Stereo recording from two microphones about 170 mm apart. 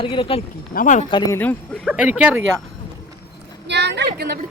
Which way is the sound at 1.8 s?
10° right (ahead or behind).